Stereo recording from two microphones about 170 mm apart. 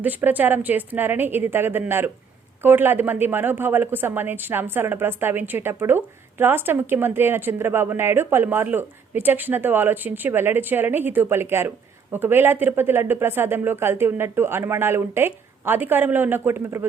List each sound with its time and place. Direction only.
0.0 s speech: 10° right (ahead or behind)